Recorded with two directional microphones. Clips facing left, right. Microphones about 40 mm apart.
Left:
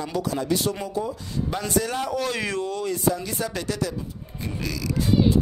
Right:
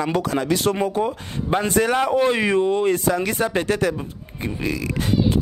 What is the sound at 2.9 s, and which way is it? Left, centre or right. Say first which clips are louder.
Speech: right 4 dB; right.